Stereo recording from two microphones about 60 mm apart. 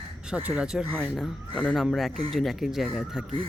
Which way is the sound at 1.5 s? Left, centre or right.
Centre.